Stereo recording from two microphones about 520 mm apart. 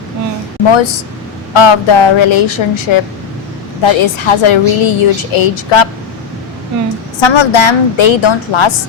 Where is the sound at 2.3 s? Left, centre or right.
Left.